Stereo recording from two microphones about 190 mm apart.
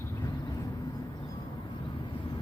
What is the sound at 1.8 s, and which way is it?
Vehicle, 25° left (ahead or behind).